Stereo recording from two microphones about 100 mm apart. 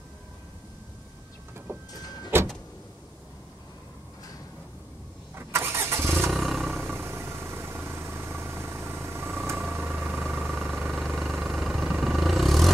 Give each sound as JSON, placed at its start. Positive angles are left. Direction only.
{"t": 1.7, "sound": "a sound", "side_deg": -25}
{"t": 2.3, "sound": "power windows", "side_deg": -20}
{"t": 5.3, "sound": "vehicle", "side_deg": -25}
{"t": 6.1, "sound": "vehicle", "side_deg": 0}
{"t": 6.9, "sound": "vehicle", "side_deg": -25}
{"t": 11.0, "sound": "vehicle", "side_deg": 0}